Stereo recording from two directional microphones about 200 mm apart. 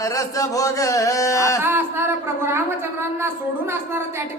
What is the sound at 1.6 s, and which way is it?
A woman's voice, 10° right (ahead or behind).